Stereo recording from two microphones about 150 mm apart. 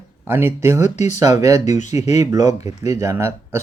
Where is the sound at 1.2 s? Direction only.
20° right (ahead or behind).